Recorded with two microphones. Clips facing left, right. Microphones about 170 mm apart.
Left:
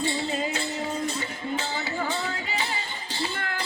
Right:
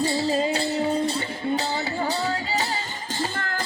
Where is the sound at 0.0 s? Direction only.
35° right (ahead or behind).